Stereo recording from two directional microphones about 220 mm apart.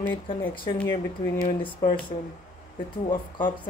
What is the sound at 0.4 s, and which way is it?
Speech, 10° left (ahead or behind).